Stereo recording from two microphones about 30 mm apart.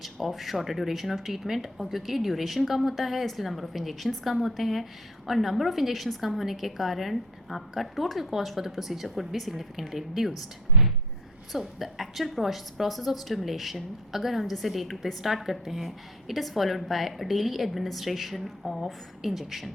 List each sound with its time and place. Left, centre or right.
0.0 s speech: centre
8.3 s speech: centre
10.7 s a sound: right
11.5 s speech: centre